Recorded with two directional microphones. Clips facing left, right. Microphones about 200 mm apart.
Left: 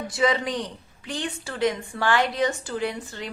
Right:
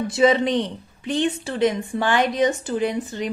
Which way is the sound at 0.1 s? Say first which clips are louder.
Right 6 dB; 25° right (ahead or behind).